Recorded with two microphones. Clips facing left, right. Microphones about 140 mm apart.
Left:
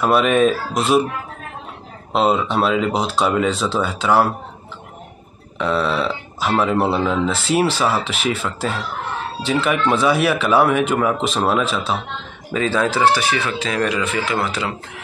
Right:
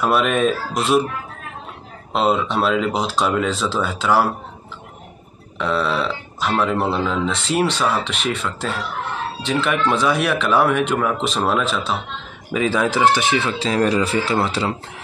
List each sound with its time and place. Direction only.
0.0 s speech: centre (ahead or behind)
2.1 s speech: centre (ahead or behind)
5.6 s speech: centre (ahead or behind)
12.5 s speech: 15° right (ahead or behind); by 14.7 s 30° right (ahead or behind)